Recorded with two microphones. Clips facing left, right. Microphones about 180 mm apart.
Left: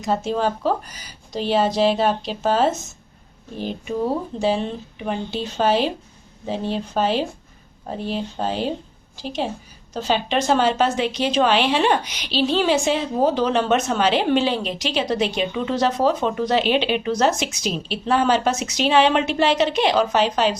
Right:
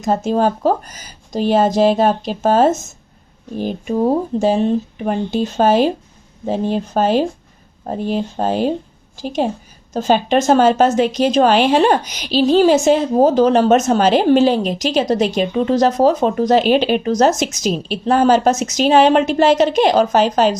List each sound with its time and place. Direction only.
0.0 s a woman's voice: 45° right (ahead or behind)